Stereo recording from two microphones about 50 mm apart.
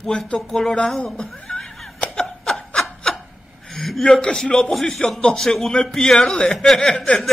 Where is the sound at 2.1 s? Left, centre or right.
Centre.